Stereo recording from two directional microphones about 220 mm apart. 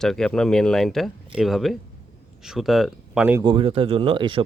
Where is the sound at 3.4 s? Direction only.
25° right (ahead or behind).